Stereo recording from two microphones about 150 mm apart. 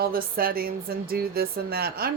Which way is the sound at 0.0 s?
80° right.